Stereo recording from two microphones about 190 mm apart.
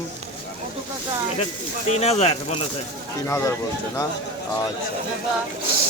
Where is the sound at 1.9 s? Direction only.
35° left (ahead or behind).